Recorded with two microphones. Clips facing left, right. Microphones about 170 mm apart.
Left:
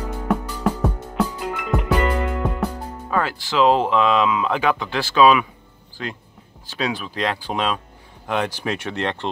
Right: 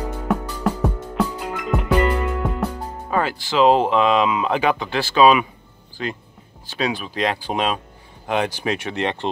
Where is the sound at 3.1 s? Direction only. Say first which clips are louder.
Right 1 dB; 10° right (ahead or behind).